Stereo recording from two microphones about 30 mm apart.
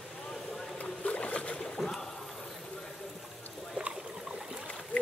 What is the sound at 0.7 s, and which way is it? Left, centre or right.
Boat, left.